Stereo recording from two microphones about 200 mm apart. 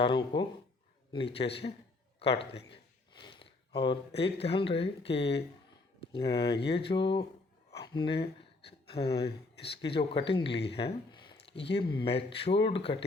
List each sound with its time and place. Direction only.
0.0 s speech: 25° left (ahead or behind)
7.8 s a sound: 25° left (ahead or behind)
9.1 s speech: 55° left (ahead or behind)
9.8 s speech: 25° left (ahead or behind)
10.8 s a sound: 25° left (ahead or behind)
11.8 s speech: 25° left (ahead or behind)